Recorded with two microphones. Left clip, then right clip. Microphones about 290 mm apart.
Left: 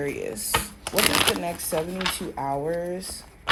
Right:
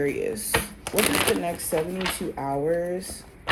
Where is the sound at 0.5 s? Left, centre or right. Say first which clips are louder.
Left 1 dB; centre.